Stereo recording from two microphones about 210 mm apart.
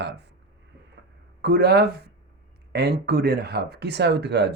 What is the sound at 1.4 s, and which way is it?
Speech, 50° right (ahead or behind).